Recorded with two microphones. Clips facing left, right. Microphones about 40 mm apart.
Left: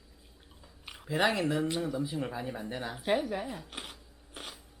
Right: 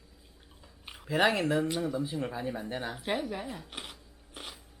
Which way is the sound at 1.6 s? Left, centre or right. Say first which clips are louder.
Right 1 dB; centre.